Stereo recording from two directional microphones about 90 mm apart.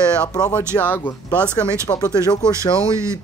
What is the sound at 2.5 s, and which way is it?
Speech, 35° right (ahead or behind).